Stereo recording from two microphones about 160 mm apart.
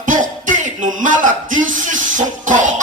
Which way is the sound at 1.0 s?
55° right (ahead or behind).